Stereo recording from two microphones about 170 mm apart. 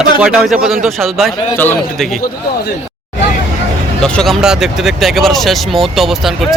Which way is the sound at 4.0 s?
Centre (ahead or behind).